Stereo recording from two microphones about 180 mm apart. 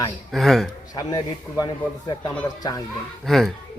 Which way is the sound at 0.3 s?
Centre (ahead or behind).